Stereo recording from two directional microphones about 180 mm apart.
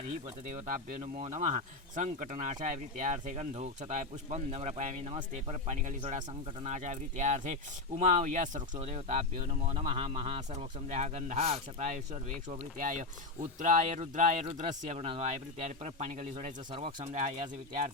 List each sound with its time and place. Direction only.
0.1 s speech: 45° right (ahead or behind)